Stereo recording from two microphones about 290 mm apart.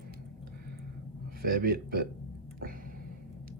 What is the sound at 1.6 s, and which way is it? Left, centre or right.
Speech, right.